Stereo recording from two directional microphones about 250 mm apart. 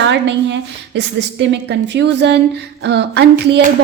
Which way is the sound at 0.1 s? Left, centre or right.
Right.